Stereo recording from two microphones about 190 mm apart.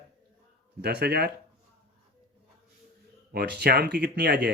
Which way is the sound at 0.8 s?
55° right (ahead or behind).